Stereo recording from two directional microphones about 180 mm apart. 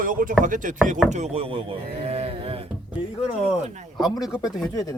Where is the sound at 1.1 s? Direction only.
35° right (ahead or behind).